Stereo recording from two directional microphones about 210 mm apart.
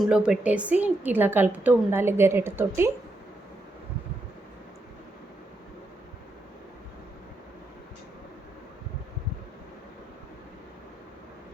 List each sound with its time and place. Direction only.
0.0 s a woman's voice: 5° right (ahead or behind)